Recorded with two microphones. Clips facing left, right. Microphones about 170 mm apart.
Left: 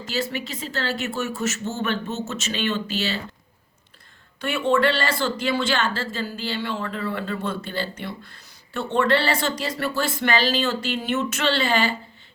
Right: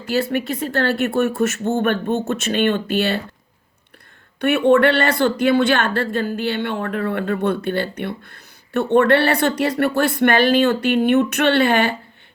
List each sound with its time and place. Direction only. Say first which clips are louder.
0.0 s speech: right 7 dB; 55° right (ahead or behind)
4.4 s speech: right 7 dB; 60° right (ahead or behind)